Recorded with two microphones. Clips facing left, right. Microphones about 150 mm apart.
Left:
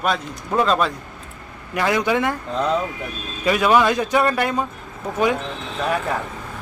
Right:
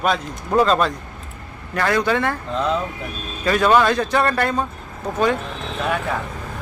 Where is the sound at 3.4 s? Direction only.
10° left (ahead or behind).